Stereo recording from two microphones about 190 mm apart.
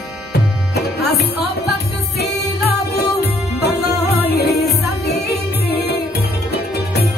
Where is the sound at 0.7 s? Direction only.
60° left (ahead or behind).